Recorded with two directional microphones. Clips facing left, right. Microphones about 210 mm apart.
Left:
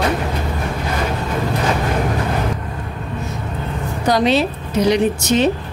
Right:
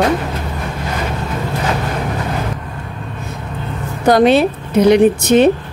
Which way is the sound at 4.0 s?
55° right (ahead or behind).